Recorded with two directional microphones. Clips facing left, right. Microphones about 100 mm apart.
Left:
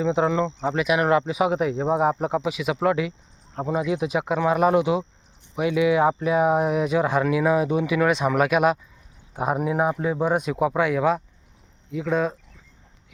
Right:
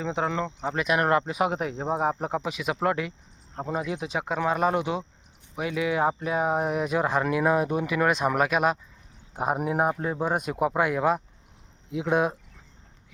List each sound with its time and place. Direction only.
0.0 s speech: 15° left (ahead or behind)
0.8 s speech: 5° left (ahead or behind); by 12.4 s 15° right (ahead or behind)